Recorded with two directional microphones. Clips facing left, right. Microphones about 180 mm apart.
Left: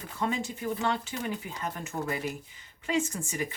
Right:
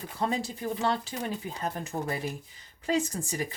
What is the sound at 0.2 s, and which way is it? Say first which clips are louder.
Speech: right 1 dB; 35° right (ahead or behind).